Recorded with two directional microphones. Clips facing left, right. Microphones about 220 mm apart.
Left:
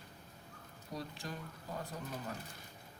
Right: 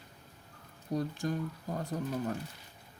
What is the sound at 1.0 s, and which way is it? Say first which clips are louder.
Speech: right 11 dB; 45° right (ahead or behind).